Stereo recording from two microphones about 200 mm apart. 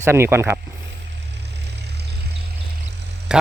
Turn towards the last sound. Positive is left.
turn(degrees=-5)  # may be behind; listen again after turning